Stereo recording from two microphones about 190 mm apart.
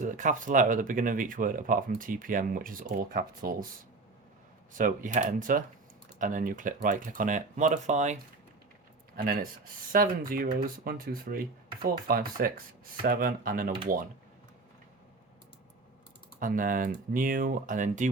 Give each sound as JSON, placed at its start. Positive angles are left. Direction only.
{"t": 0.0, "sound": "speech", "side_deg": -40}
{"t": 4.7, "sound": "speech", "side_deg": -45}
{"t": 9.1, "sound": "speech", "side_deg": -50}
{"t": 16.4, "sound": "speech", "side_deg": -45}